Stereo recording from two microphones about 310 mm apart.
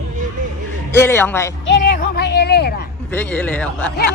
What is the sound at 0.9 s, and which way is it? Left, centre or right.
Speech, centre.